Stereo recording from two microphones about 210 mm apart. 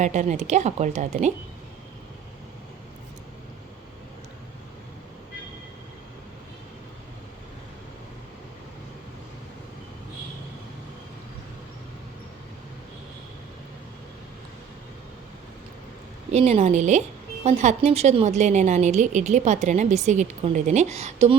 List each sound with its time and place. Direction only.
0.0 s a woman's voice: 35° right (ahead or behind)
16.3 s a woman's voice: 30° right (ahead or behind)